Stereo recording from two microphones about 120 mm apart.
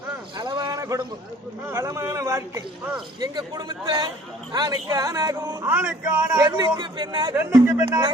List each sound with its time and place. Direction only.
0.3 s a sound: 35° right (ahead or behind)
1.6 s a man's voice: 20° right (ahead or behind)
6.3 s a man's voice: 30° right (ahead or behind)
7.6 s a man's voice: 20° right (ahead or behind)